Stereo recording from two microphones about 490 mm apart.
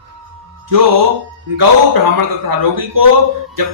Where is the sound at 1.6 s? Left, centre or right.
Right.